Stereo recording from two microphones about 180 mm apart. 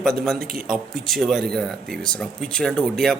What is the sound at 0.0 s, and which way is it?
Speech, centre (ahead or behind).